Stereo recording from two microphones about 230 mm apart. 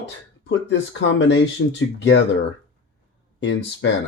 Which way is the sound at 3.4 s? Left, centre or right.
Left.